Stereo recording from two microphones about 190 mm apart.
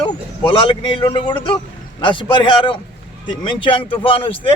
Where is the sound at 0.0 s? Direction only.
25° left (ahead or behind).